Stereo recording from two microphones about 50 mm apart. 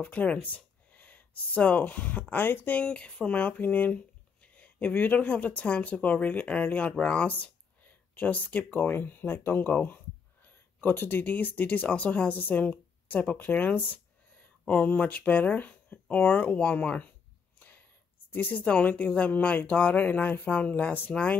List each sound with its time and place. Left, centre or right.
0.0 s speech: left
2.8 s speech: left
17.6 s a sound: left
18.3 s speech: left